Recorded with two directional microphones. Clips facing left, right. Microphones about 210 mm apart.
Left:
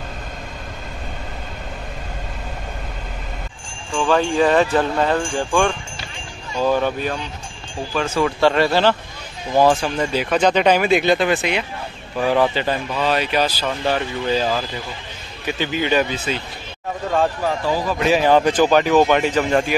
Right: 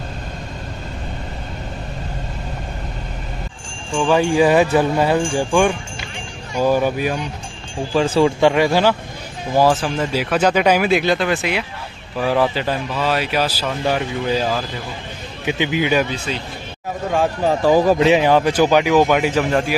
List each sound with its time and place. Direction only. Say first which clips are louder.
3.9 s speech: right 2 dB; 10° right (ahead or behind)
7.9 s speech: right 5 dB; 30° right (ahead or behind)
8.4 s speech: right 2 dB; 15° right (ahead or behind)
16.3 s speech: left 1 dB; 5° left (ahead or behind)
17.6 s speech: right 10 dB; 50° right (ahead or behind)
17.9 s speech: right 4 dB; 25° right (ahead or behind)
18.2 s speech: even; 10° right (ahead or behind)